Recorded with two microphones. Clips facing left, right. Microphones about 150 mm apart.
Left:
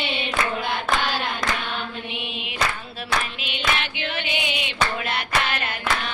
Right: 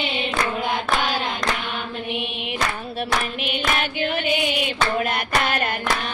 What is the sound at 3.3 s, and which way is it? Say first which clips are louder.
Hands: right 3 dB; 45° right (ahead or behind).